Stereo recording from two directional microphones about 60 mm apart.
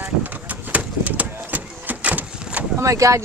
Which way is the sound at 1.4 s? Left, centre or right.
Right.